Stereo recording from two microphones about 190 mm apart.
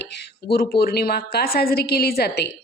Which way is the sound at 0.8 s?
55° left (ahead or behind).